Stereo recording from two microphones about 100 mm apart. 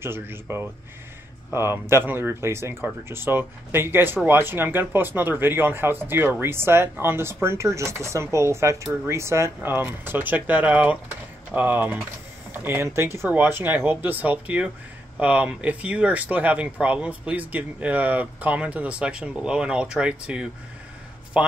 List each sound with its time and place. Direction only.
0.0 s speech: 25° right (ahead or behind)